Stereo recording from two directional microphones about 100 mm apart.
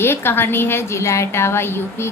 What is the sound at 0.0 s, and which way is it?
A woman's voice, 25° left (ahead or behind).